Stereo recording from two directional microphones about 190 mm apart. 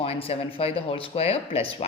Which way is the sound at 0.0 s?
30° left (ahead or behind).